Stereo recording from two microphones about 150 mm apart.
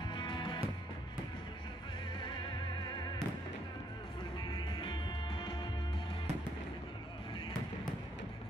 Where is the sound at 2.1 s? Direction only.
30° left (ahead or behind).